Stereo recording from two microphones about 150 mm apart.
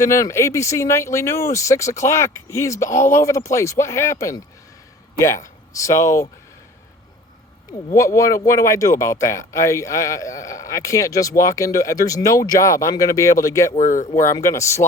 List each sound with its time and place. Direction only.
0.0 s a man's voice: 20° left (ahead or behind)
7.9 s a man's voice: 20° left (ahead or behind)
13.7 s speech: 60° left (ahead or behind)
14.2 s a man's voice: 20° left (ahead or behind)